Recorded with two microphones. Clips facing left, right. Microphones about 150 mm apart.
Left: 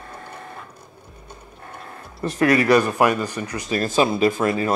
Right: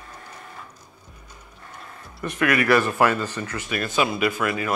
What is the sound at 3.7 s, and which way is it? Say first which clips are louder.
Speech: left 5 dB; 35° left (ahead or behind).